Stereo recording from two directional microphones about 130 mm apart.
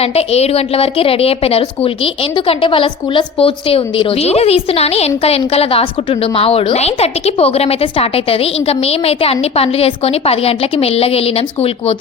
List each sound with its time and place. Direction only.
0.0 s a woman's voice: 50° left (ahead or behind)